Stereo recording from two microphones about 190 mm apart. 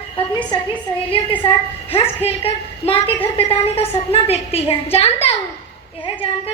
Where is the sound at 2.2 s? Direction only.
30° left (ahead or behind).